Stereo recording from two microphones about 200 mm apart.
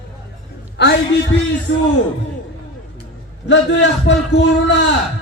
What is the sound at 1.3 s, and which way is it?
Speech, 75° left (ahead or behind).